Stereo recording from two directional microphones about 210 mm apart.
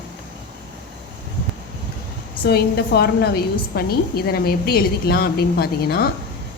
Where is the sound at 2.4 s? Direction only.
50° left (ahead or behind).